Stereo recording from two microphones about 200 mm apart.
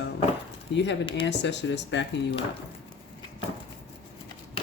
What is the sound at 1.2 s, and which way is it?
Speech, 60° left (ahead or behind).